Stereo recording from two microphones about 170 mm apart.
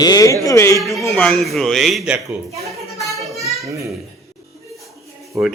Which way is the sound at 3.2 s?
Centre (ahead or behind).